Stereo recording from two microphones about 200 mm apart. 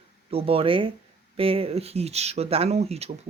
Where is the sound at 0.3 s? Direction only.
30° right (ahead or behind).